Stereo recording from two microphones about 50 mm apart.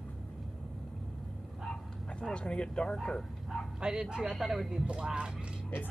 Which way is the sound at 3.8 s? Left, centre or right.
Centre.